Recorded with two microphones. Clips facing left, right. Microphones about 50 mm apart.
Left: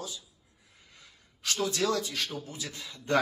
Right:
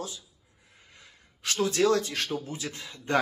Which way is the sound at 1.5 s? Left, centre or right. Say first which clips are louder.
Right 5 dB; right.